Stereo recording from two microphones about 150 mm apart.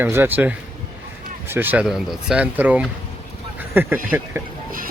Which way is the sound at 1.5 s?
10° right (ahead or behind).